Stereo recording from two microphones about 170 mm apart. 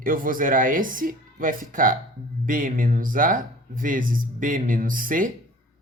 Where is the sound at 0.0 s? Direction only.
55° right (ahead or behind).